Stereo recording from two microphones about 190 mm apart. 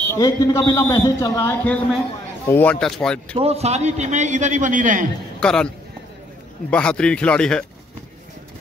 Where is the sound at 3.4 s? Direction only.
35° right (ahead or behind).